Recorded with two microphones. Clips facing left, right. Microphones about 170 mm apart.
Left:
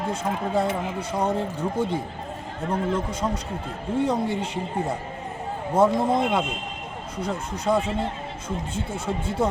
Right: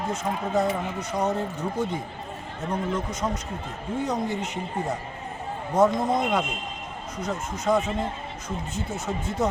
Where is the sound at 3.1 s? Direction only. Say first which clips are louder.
Left 2 dB; 30° left (ahead or behind).